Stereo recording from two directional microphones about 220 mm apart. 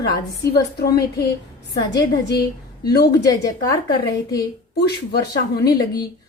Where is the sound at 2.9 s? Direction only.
45° left (ahead or behind).